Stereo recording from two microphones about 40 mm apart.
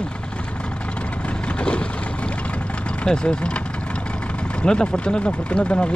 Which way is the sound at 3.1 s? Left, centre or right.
Left.